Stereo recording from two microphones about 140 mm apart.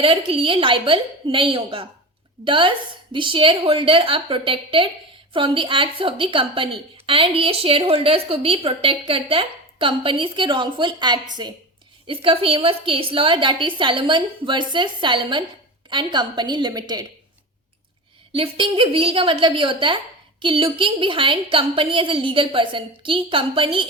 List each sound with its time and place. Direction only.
0.0 s a woman's voice: 40° right (ahead or behind)
18.3 s a woman's voice: 40° right (ahead or behind)